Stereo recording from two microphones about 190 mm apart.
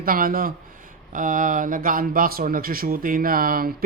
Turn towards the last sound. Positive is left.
turn(degrees=-50)  # may be behind; listen again after turning